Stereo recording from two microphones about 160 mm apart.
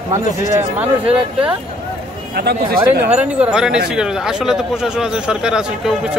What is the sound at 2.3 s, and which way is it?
Speech, 75° right (ahead or behind).